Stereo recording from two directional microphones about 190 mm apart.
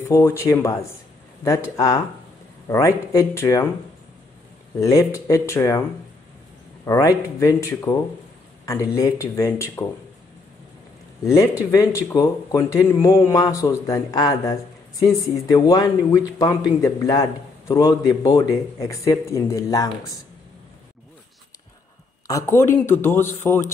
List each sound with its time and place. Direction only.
0.0 s speech: 15° left (ahead or behind)
4.7 s speech: 15° left (ahead or behind)
11.2 s speech: 15° left (ahead or behind)
22.3 s speech: 15° left (ahead or behind)